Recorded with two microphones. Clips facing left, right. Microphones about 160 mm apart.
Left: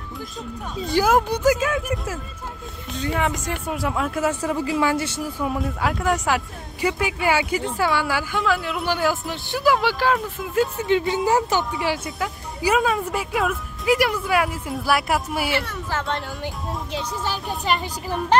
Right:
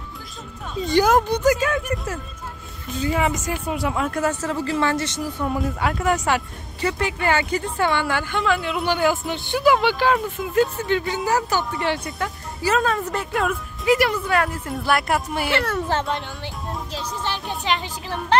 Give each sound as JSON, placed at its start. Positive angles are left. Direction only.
{"t": 0.7, "sound": "speech", "side_deg": 0}
{"t": 10.8, "sound": "speech", "side_deg": 20}
{"t": 11.7, "sound": "speech", "side_deg": 5}
{"t": 15.5, "sound": "speech", "side_deg": -80}
{"t": 16.9, "sound": "speech", "side_deg": 10}